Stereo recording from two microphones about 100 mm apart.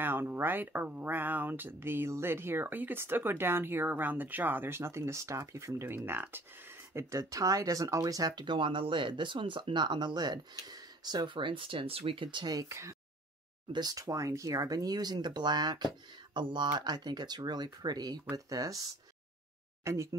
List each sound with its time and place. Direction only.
0.0 s speech: 20° right (ahead or behind); by 12.5 s 55° right (ahead or behind)
12.5 s speech: 30° right (ahead or behind)
13.7 s speech: 45° right (ahead or behind)